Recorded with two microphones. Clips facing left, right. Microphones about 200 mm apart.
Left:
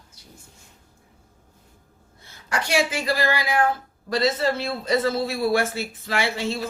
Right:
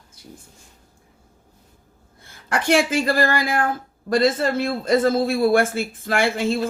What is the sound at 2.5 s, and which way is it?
Speech, 50° right (ahead or behind).